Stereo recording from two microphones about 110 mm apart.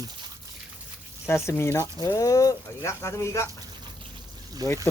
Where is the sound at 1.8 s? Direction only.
35° left (ahead or behind).